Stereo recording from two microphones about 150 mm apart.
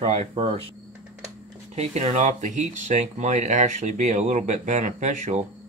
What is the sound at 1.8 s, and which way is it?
Speech, 45° right (ahead or behind).